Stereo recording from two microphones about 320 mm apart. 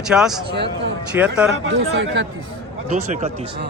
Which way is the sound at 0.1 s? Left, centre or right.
Centre.